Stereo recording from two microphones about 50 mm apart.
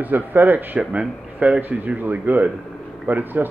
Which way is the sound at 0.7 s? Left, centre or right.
Right.